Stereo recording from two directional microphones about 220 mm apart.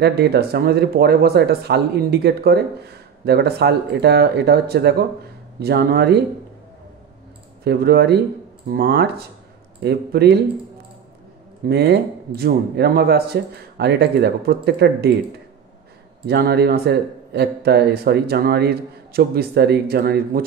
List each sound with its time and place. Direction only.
0.0 s speech: 45° right (ahead or behind)
7.6 s speech: 45° right (ahead or behind)
11.6 s speech: 45° right (ahead or behind)
16.3 s speech: 45° right (ahead or behind)